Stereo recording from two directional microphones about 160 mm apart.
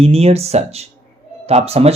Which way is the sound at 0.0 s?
40° right (ahead or behind).